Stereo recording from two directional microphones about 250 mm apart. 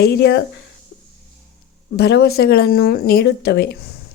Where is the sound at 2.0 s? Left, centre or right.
Left.